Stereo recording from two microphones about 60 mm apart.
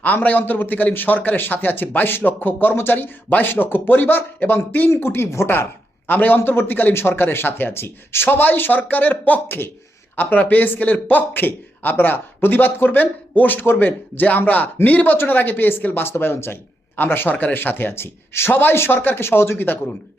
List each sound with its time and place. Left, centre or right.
0.0 s speech: left
6.1 s speech: left